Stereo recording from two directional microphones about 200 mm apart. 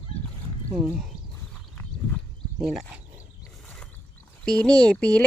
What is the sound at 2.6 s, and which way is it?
Speech, centre (ahead or behind).